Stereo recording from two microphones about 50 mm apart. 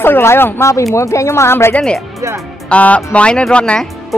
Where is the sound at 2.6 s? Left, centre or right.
Left.